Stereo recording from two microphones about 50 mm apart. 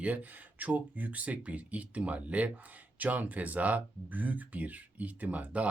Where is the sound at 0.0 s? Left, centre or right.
Right.